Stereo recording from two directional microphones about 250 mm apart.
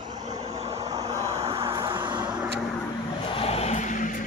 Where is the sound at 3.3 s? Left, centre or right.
Left.